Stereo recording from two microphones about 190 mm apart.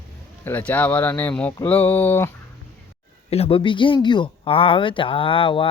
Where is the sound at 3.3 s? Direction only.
30° left (ahead or behind).